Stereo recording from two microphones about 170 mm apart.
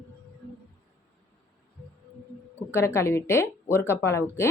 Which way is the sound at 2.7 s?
15° left (ahead or behind).